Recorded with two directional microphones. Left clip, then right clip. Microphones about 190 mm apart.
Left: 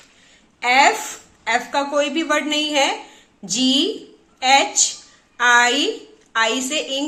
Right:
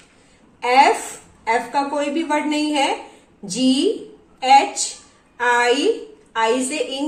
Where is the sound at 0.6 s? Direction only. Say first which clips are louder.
Right 1 dB; 35° left (ahead or behind).